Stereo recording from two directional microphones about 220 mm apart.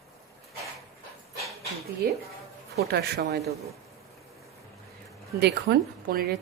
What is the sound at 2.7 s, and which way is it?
Speech, 45° right (ahead or behind).